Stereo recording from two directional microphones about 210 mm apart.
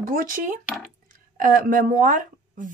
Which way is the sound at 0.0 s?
40° right (ahead or behind).